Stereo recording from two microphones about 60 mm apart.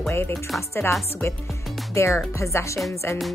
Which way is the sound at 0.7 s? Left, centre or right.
Left.